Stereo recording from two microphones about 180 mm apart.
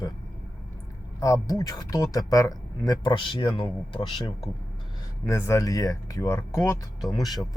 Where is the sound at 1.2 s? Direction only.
20° left (ahead or behind).